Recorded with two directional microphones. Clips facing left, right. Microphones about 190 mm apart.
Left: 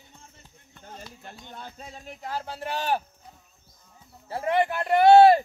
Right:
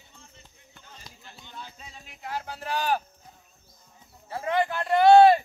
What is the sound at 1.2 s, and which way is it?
Speech, 55° left (ahead or behind).